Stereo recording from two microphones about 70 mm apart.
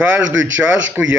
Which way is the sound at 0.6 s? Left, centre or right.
Right.